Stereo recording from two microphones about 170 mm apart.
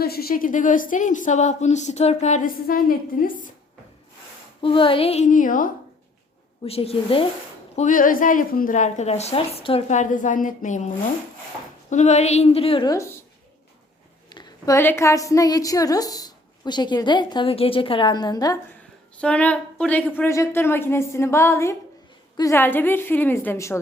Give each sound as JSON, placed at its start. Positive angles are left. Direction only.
{"t": 0.0, "sound": "speech", "side_deg": 65}
{"t": 4.6, "sound": "a woman's voice", "side_deg": 30}
{"t": 6.7, "sound": "a woman's voice", "side_deg": 35}
{"t": 7.8, "sound": "a woman's voice", "side_deg": 50}
{"t": 12.9, "sound": "a woman's voice", "side_deg": 15}
{"t": 14.3, "sound": "a woman's voice", "side_deg": 25}
{"t": 19.1, "sound": "a woman's voice", "side_deg": 5}